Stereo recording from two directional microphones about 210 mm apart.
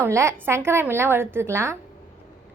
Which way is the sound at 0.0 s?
15° right (ahead or behind).